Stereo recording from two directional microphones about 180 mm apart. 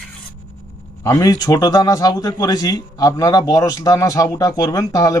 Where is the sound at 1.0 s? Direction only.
20° left (ahead or behind).